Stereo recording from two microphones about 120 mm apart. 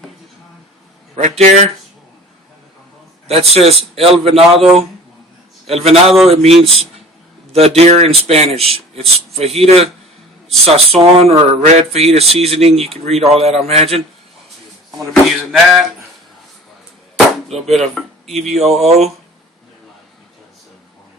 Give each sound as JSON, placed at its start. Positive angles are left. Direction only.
{"t": 1.1, "sound": "speech", "side_deg": -75}
{"t": 3.2, "sound": "a man's voice", "side_deg": -55}
{"t": 5.6, "sound": "speech", "side_deg": -55}
{"t": 14.9, "sound": "speech", "side_deg": 0}
{"t": 17.7, "sound": "speech", "side_deg": 0}
{"t": 18.5, "sound": "speech", "side_deg": -60}